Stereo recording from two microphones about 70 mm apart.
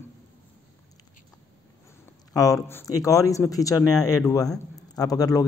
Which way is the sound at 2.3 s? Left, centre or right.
Left.